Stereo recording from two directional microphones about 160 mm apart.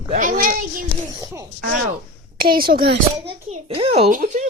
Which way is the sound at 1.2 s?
20° right (ahead or behind).